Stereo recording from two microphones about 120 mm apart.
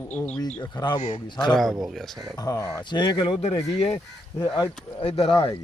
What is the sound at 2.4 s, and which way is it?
Speech, 35° left (ahead or behind).